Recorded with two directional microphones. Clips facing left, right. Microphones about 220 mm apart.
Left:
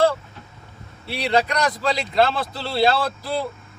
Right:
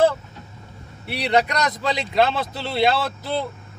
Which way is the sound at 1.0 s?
20° right (ahead or behind).